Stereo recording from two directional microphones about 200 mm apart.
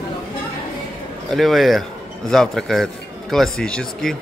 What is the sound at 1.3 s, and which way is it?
A man's voice, centre (ahead or behind).